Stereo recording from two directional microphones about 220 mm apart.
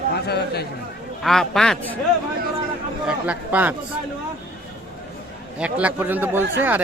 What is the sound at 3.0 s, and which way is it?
Speech, 5° right (ahead or behind).